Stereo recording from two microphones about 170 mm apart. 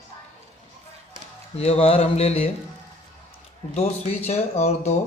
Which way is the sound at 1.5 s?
35° left (ahead or behind).